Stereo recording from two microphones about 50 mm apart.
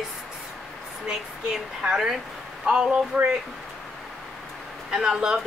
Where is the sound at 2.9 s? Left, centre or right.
Right.